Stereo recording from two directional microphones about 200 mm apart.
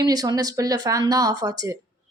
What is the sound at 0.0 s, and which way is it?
Speech, 20° right (ahead or behind).